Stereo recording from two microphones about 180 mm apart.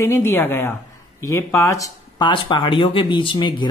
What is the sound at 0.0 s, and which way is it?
A woman's voice, 15° left (ahead or behind).